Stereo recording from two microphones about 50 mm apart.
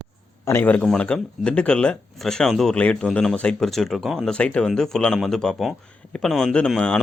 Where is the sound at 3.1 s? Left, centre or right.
Centre.